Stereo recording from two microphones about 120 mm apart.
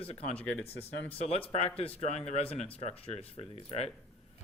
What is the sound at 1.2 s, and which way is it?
Speech, 55° left (ahead or behind).